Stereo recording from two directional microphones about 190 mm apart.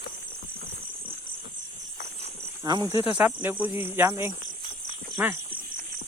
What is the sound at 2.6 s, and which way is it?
Speech, 20° right (ahead or behind).